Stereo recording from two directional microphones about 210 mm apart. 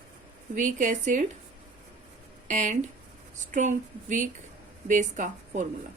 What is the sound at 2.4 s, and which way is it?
Speech, 35° right (ahead or behind).